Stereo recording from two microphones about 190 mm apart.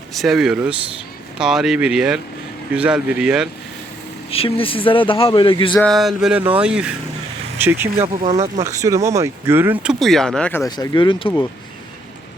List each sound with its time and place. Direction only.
0.2 s a sound: centre (ahead or behind)
4.3 s speech: 30° left (ahead or behind)
5.7 s a sound: 5° left (ahead or behind)
7.6 s speech: 10° right (ahead or behind)
7.9 s speech: 30° right (ahead or behind)
8.6 s speech: 15° right (ahead or behind); by 10.6 s 5° left (ahead or behind)
10.6 s speech: 20° left (ahead or behind)